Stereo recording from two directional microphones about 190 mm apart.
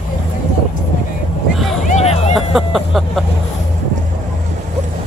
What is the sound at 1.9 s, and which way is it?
Music, 35° left (ahead or behind).